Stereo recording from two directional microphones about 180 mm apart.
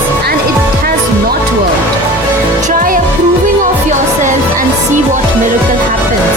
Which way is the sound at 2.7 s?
50° right (ahead or behind).